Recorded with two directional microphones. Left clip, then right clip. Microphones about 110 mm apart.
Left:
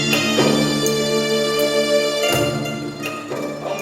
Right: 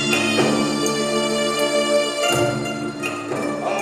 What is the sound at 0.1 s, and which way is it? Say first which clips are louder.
Music: left 2 dB; 45° right (ahead or behind).